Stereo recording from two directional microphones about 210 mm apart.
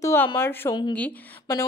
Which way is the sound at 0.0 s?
15° left (ahead or behind).